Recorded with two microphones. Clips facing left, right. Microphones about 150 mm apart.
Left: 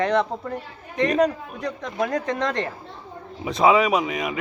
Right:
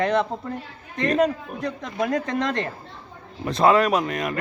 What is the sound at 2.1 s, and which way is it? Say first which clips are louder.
Speech: right 3 dB; 20° left (ahead or behind).